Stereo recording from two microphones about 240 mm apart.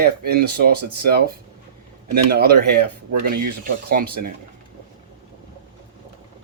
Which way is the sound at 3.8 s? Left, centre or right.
Right.